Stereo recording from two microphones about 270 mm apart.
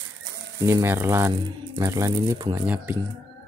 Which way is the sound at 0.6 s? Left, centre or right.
Centre.